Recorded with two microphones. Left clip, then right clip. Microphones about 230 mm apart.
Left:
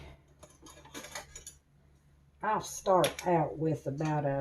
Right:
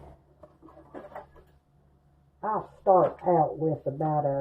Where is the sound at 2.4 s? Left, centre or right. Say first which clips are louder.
Right 2 dB; left.